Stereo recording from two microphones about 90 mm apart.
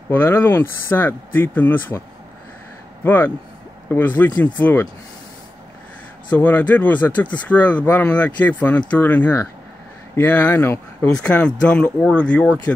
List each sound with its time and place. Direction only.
0.1 s speech: 25° left (ahead or behind)
6.3 s speech: 20° left (ahead or behind)
11.2 s speech: 10° left (ahead or behind)